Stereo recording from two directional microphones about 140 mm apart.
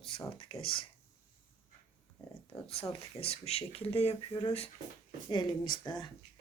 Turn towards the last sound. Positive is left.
turn(degrees=30)  # may be behind; listen again after turning